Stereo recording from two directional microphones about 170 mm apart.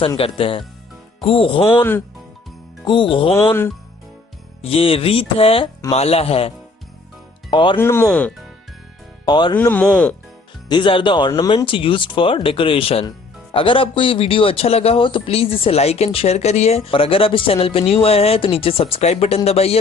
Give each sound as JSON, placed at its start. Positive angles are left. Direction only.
{"t": 0.0, "sound": "speech", "side_deg": 30}
{"t": 2.8, "sound": "music", "side_deg": 30}
{"t": 4.7, "sound": "speech", "side_deg": 35}
{"t": 7.5, "sound": "music", "side_deg": 30}
{"t": 7.8, "sound": "speech", "side_deg": 15}
{"t": 9.2, "sound": "music", "side_deg": 25}
{"t": 9.6, "sound": "speech", "side_deg": 10}
{"t": 10.7, "sound": "speech", "side_deg": 30}